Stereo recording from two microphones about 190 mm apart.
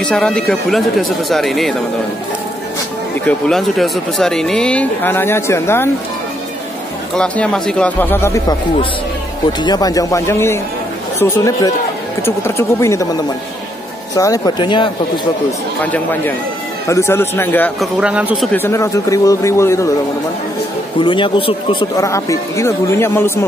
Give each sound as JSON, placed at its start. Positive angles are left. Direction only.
{"t": 0.0, "sound": "speech", "side_deg": 5}
{"t": 3.3, "sound": "speech", "side_deg": 5}
{"t": 7.2, "sound": "speech", "side_deg": 5}
{"t": 9.6, "sound": "speech", "side_deg": 20}
{"t": 15.8, "sound": "speech", "side_deg": 10}
{"t": 18.0, "sound": "speech", "side_deg": -5}
{"t": 18.5, "sound": "speech", "side_deg": 15}
{"t": 21.0, "sound": "speech", "side_deg": 25}